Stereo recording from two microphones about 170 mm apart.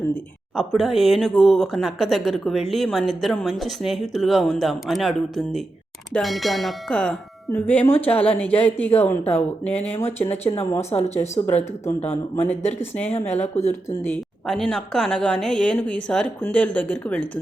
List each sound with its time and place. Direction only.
0.5 s speech: centre (ahead or behind)
6.1 s speech: centre (ahead or behind)
10.8 s speech: 40° left (ahead or behind)
13.7 s speech: 15° left (ahead or behind)
14.4 s speech: centre (ahead or behind)